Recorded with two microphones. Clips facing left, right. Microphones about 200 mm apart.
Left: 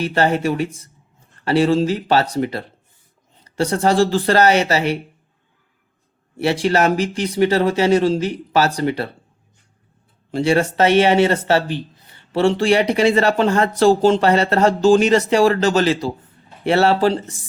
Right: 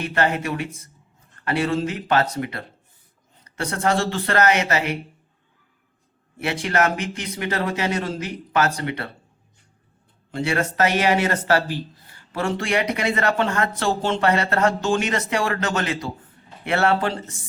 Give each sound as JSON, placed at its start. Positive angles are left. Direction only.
{"t": 0.0, "sound": "speech", "side_deg": 30}
{"t": 6.4, "sound": "speech", "side_deg": 30}
{"t": 10.3, "sound": "speech", "side_deg": 30}